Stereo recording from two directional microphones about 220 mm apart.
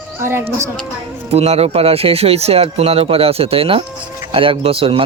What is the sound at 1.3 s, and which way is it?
Speech, 30° right (ahead or behind).